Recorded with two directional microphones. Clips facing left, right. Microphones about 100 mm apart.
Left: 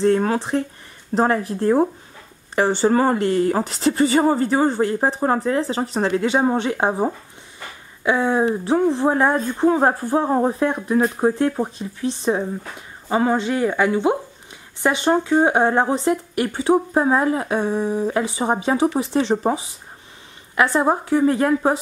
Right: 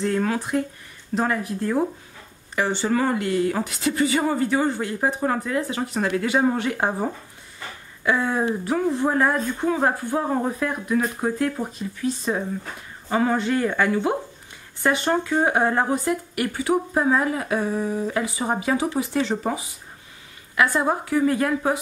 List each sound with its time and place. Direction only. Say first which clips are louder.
0.0 s speech: left 5 dB; 30° left (ahead or behind)